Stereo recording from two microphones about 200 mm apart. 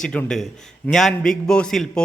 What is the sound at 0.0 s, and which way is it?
A man's voice, 5° left (ahead or behind).